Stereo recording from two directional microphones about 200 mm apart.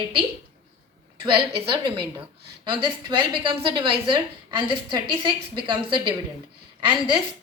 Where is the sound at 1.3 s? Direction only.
25° right (ahead or behind).